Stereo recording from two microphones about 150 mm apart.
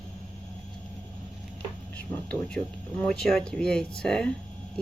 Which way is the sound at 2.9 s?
5° left (ahead or behind).